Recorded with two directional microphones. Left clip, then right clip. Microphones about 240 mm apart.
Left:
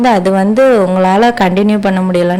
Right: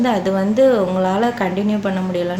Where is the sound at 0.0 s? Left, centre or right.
Left.